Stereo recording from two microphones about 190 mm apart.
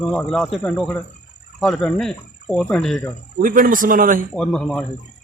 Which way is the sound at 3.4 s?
45° right (ahead or behind).